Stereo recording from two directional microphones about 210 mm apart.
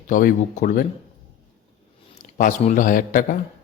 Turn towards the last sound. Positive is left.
turn(degrees=40)  # may be behind; listen again after turning